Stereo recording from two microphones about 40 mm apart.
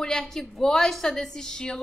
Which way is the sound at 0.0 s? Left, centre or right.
Centre.